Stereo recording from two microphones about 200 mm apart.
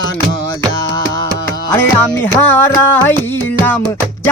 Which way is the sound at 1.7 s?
10° left (ahead or behind).